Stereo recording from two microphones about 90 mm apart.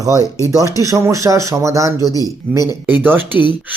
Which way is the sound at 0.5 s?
35° right (ahead or behind).